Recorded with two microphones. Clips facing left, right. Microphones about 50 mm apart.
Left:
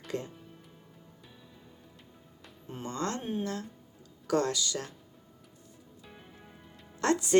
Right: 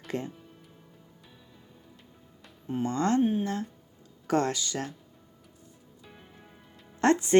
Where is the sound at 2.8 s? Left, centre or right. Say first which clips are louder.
Right 9 dB; right.